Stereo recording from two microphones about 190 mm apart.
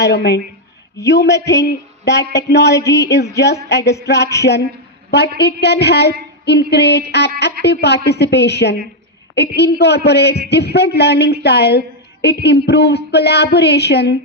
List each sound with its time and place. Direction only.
0.0 s a woman's voice: 60° left (ahead or behind)
5.4 s a woman's voice: 60° left (ahead or behind)